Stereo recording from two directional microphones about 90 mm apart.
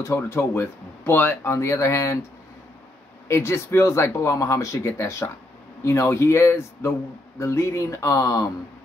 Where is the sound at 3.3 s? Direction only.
30° left (ahead or behind).